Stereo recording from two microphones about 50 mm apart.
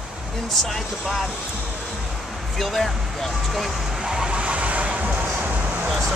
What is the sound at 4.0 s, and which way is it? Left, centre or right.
Vehicle, centre.